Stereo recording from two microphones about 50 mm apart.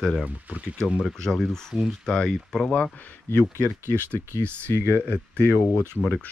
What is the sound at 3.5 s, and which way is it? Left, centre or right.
Speech, right.